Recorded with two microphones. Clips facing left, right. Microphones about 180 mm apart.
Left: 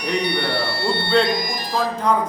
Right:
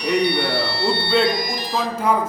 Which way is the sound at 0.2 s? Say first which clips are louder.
Right 2 dB; 50° left (ahead or behind).